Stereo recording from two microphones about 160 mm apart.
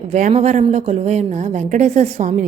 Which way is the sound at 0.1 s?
50° right (ahead or behind).